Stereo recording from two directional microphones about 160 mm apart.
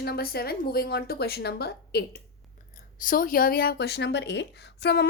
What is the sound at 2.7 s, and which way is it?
Speech, 60° left (ahead or behind).